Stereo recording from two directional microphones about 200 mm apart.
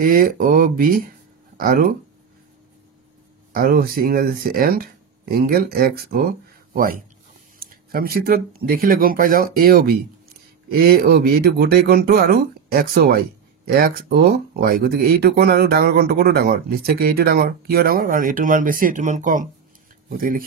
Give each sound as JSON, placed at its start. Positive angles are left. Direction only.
{"t": 0.0, "sound": "speech", "side_deg": -45}
{"t": 3.5, "sound": "speech", "side_deg": -45}